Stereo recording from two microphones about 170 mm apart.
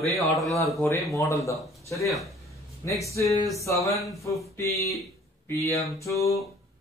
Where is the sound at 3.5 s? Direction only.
20° left (ahead or behind).